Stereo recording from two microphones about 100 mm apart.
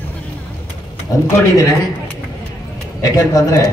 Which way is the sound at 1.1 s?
35° left (ahead or behind).